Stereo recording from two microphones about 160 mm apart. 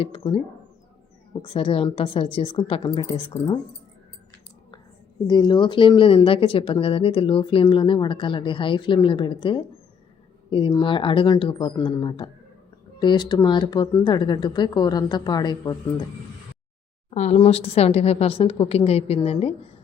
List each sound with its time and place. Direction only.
0.0 s speech: 35° left (ahead or behind)
5.3 s speech: 30° left (ahead or behind)
17.1 s speech: 45° left (ahead or behind)